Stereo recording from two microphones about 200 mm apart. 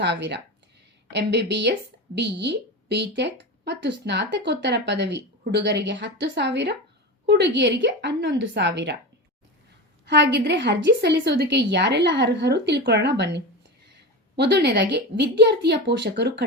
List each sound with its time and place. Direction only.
0.0 s speech: 60° right (ahead or behind)
10.1 s speech: 60° right (ahead or behind)